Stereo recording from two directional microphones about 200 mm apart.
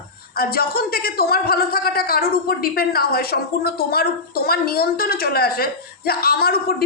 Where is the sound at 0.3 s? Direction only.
50° left (ahead or behind).